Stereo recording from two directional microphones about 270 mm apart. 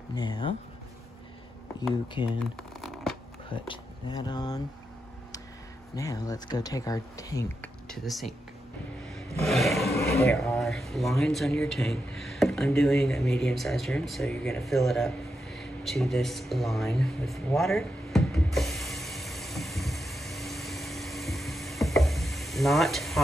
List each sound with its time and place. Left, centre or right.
0.1 s speech: centre
2.2 s speech: centre
2.5 s shuffling cards: centre
3.5 s speech: centre
5.9 s speech: centre
7.9 s speech: centre
9.5 s a sound: centre